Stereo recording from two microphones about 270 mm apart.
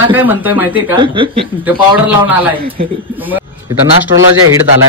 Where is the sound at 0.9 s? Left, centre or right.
Centre.